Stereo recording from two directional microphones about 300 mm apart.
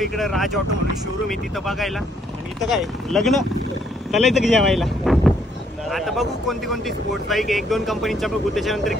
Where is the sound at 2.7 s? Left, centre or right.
Centre.